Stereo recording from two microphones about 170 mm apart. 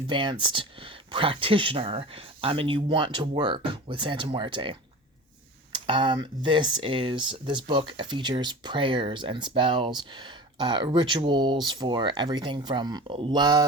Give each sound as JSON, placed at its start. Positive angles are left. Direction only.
{"t": 0.1, "sound": "speech", "side_deg": -30}